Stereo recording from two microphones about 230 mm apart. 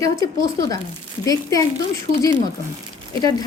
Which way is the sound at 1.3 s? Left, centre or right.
Centre.